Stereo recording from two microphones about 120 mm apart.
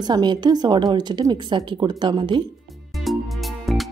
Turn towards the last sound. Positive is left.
turn(degrees=0)  # may be behind; listen again after turning